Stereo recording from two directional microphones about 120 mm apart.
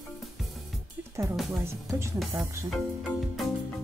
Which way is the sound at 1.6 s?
20° right (ahead or behind).